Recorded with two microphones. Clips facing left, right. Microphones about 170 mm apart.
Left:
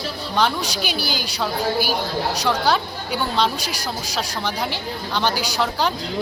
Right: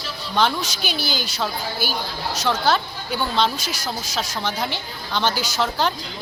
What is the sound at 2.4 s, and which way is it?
Speech, 10° left (ahead or behind).